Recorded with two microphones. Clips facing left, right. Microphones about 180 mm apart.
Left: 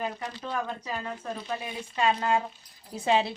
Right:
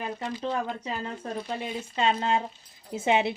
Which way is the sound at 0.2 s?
25° right (ahead or behind).